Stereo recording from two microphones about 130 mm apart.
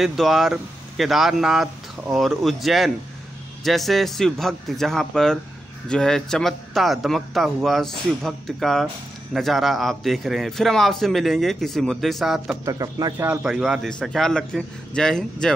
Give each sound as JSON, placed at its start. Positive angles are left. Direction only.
{"t": 0.0, "sound": "a man's voice", "side_deg": 0}
{"t": 12.6, "sound": "speech", "side_deg": -30}
{"t": 13.3, "sound": "a man's voice", "side_deg": -10}